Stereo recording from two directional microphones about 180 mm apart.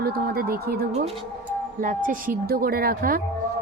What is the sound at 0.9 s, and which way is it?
A woman's voice, 40° right (ahead or behind).